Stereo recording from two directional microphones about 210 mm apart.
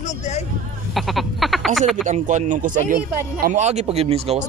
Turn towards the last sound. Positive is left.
turn(degrees=-30)  # may be behind; listen again after turning